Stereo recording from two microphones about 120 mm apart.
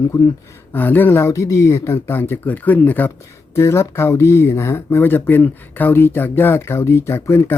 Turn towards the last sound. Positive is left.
turn(degrees=20)  # may be behind; listen again after turning